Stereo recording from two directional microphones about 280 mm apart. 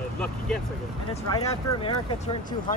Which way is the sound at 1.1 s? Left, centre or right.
Left.